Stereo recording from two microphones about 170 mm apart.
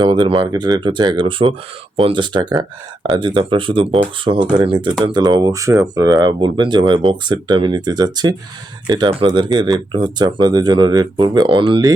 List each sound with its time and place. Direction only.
0.0 s speech: 30° right (ahead or behind)